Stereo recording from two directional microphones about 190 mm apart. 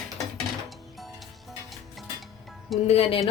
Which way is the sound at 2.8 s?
30° left (ahead or behind).